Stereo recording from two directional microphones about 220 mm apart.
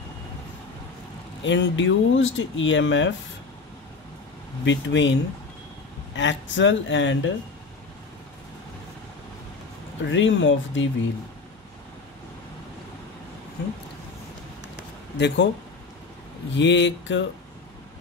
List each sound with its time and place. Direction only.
1.4 s speech: 55° left (ahead or behind)
4.6 s speech: 55° left (ahead or behind)
6.1 s speech: 55° left (ahead or behind)
10.0 s speech: 60° left (ahead or behind)
15.1 s speech: 50° left (ahead or behind)
16.5 s speech: 55° left (ahead or behind)